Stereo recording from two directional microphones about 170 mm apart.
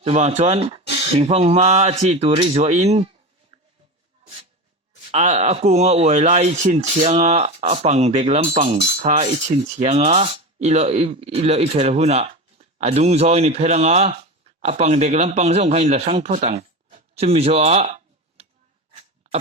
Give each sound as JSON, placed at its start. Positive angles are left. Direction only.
{"t": 0.0, "sound": "speech", "side_deg": -40}
{"t": 3.5, "sound": "a sound", "side_deg": -30}
{"t": 5.1, "sound": "speech", "side_deg": -45}
{"t": 9.0, "sound": "cutlery", "side_deg": -45}
{"t": 9.3, "sound": "a sound", "side_deg": -45}
{"t": 18.9, "sound": "dog", "side_deg": -40}